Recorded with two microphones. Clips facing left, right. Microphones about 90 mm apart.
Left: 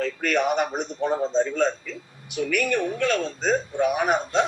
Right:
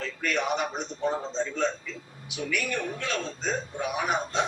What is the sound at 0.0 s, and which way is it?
A man's voice, 60° left (ahead or behind).